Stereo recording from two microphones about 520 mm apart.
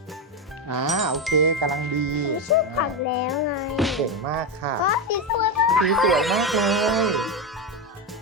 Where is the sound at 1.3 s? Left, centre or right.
Right.